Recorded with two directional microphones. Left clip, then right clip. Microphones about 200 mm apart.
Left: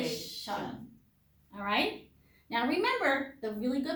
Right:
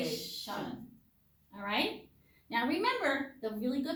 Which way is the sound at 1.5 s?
20° left (ahead or behind).